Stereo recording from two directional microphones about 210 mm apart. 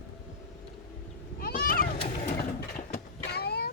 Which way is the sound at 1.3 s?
45° left (ahead or behind).